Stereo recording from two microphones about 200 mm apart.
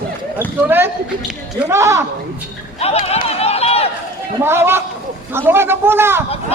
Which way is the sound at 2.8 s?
30° left (ahead or behind).